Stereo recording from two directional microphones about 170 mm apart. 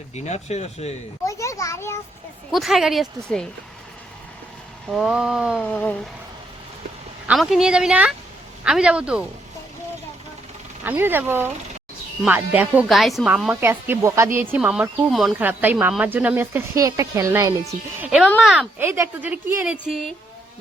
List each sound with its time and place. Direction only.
0.1 s speech: 40° left (ahead or behind)
1.2 s a sound: 20° left (ahead or behind)
2.5 s a woman's voice: centre (ahead or behind)
4.9 s a woman's voice: 5° right (ahead or behind)
5.6 s speech: 10° left (ahead or behind)
7.3 s a woman's voice: centre (ahead or behind)
10.8 s speech: 15° right (ahead or behind)
18.4 s a woman's voice: centre (ahead or behind)
18.8 s speech: 15° right (ahead or behind)